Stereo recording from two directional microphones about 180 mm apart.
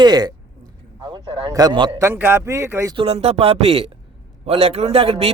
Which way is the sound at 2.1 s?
10° right (ahead or behind).